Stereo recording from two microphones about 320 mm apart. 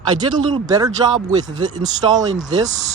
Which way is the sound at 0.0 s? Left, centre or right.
Centre.